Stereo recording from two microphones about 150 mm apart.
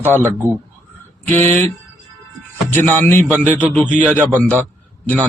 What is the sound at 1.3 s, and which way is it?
Speech, 10° left (ahead or behind).